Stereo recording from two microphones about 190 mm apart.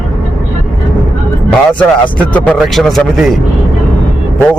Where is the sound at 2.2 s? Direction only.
10° left (ahead or behind).